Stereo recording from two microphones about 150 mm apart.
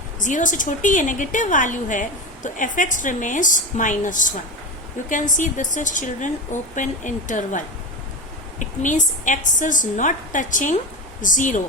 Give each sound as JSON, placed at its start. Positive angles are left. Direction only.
{"t": 0.2, "sound": "a woman's voice", "side_deg": 55}